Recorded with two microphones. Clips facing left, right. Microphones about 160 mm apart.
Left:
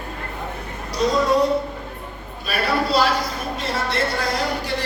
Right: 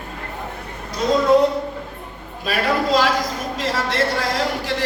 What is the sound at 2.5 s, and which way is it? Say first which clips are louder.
A man's voice: right 2 dB; 90° right.